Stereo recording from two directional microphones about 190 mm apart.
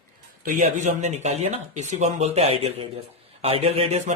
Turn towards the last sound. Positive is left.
turn(degrees=-35)  # may be behind; listen again after turning